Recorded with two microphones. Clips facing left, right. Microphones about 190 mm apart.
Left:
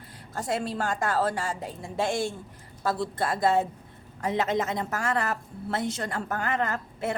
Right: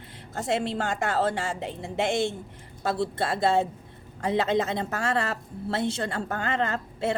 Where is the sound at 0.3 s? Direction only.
25° right (ahead or behind).